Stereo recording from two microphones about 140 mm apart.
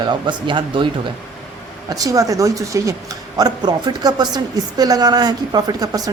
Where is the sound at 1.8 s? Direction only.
25° right (ahead or behind).